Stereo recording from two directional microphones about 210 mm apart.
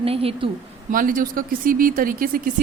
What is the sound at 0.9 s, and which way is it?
A woman's voice, 40° right (ahead or behind).